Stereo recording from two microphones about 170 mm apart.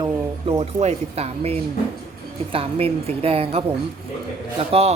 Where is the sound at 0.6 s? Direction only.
40° right (ahead or behind).